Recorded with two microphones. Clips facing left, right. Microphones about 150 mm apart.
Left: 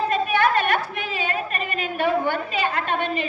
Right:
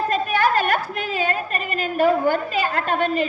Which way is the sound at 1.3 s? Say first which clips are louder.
Right 2 dB; 40° right (ahead or behind).